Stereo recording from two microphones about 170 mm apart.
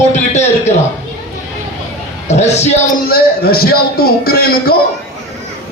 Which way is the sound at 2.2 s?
40° left (ahead or behind).